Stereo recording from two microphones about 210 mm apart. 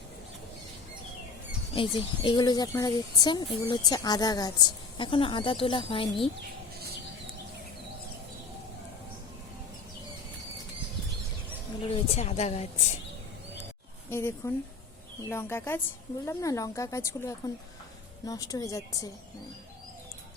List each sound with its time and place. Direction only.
1.7 s speech: 25° left (ahead or behind)
11.9 s a woman's voice: 30° left (ahead or behind)
14.1 s speech: 10° left (ahead or behind)